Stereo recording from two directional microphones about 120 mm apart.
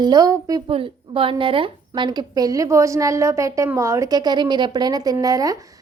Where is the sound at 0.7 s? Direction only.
50° right (ahead or behind).